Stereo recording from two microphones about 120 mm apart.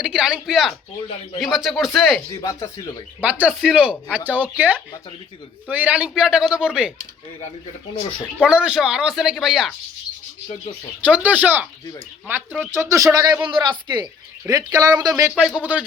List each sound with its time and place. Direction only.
0.0 s speech: 5° right (ahead or behind)
2.4 s speech: 35° left (ahead or behind)
3.2 s speech: 15° right (ahead or behind)
8.4 s speech: 10° right (ahead or behind)
11.0 s speech: 10° right (ahead or behind); by 13.4 s 30° right (ahead or behind)
13.5 s speech: 40° right (ahead or behind)
15.4 s speech: 5° right (ahead or behind)